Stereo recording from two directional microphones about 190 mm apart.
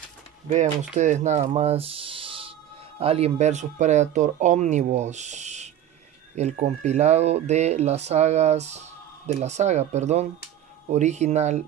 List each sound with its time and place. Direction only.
0.9 s speech: 40° right (ahead or behind)